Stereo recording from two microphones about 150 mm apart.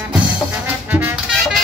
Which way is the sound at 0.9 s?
15° right (ahead or behind).